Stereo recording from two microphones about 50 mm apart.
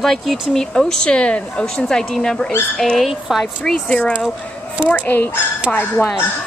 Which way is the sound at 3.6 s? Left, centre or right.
Left.